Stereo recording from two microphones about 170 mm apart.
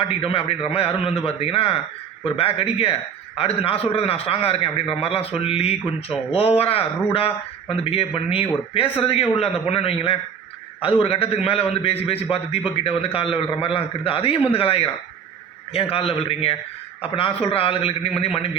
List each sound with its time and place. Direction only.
0.2 s a man's voice: 35° left (ahead or behind)